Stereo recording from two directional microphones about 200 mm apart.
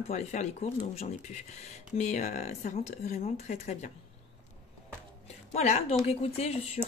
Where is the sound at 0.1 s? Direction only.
35° left (ahead or behind).